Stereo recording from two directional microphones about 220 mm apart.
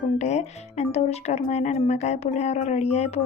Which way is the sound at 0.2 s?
30° left (ahead or behind).